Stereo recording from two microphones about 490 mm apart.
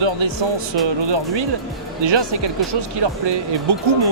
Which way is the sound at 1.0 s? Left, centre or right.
Right.